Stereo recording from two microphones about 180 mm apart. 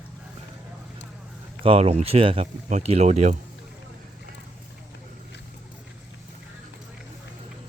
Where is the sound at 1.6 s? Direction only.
35° right (ahead or behind).